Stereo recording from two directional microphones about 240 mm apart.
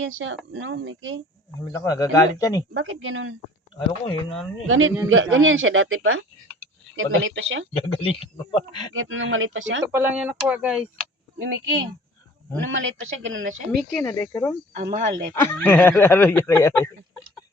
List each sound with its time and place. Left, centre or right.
0.0 s speech: right
1.6 s speech: centre
2.7 s speech: right
3.8 s speech: centre
4.6 s speech: right
7.8 s a man's voice: left
9.0 s speech: right
9.9 s speech: centre
13.0 s speech: right
13.7 s speech: centre
14.8 s speech: right
15.4 s speech: centre